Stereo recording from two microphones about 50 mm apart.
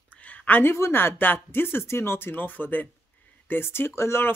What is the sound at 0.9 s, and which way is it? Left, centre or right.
Speech, left.